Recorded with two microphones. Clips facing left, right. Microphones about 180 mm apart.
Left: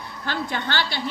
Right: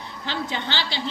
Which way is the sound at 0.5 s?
50° left (ahead or behind).